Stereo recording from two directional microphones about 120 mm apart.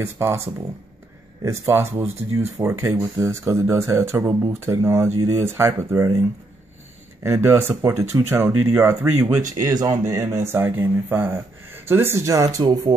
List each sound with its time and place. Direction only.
0.0 s speech: 20° right (ahead or behind)
1.4 s speech: 20° right (ahead or behind)
7.2 s speech: 25° right (ahead or behind)